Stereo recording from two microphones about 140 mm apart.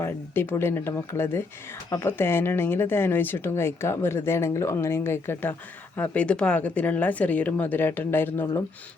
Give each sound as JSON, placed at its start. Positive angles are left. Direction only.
{"t": 0.0, "sound": "speech", "side_deg": 15}